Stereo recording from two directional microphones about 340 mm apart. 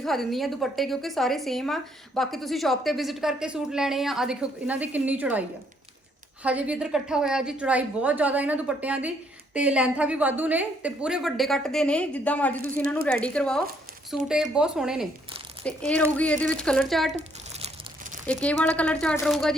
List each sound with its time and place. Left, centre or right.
0.0 s a woman's voice: centre
17.2 s crumpling: centre
18.4 s a woman's voice: centre